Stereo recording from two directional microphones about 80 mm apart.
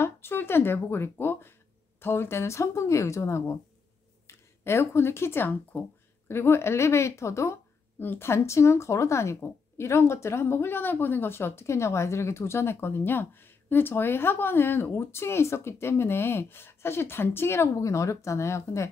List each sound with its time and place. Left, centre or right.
0.0 s speech: left